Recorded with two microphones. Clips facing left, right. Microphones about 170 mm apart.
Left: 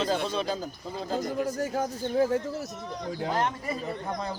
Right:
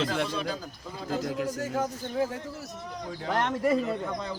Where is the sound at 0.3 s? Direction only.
25° left (ahead or behind).